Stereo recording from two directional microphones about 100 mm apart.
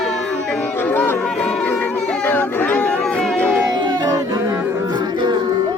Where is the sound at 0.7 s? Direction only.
20° left (ahead or behind).